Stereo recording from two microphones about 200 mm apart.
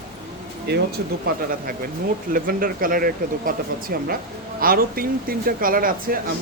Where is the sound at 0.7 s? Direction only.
55° right (ahead or behind).